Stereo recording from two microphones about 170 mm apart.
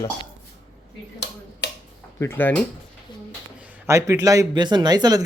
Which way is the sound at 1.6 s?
90° left.